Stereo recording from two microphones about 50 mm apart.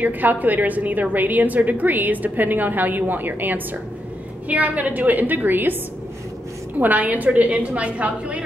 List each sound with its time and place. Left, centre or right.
0.0 s a woman's voice: right
6.8 s a woman's voice: right